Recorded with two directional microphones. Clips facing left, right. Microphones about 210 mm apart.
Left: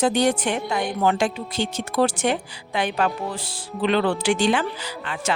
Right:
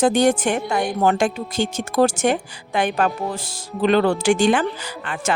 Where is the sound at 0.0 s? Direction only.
45° right (ahead or behind).